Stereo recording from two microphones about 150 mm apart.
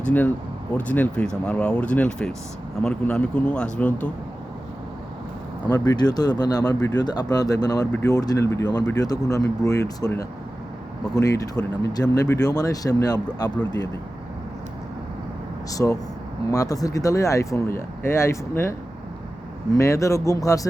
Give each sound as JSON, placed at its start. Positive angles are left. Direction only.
{"t": 0.8, "sound": "speech", "side_deg": 10}
{"t": 5.6, "sound": "speech", "side_deg": 25}
{"t": 15.7, "sound": "speech", "side_deg": 20}
{"t": 19.7, "sound": "speech", "side_deg": 20}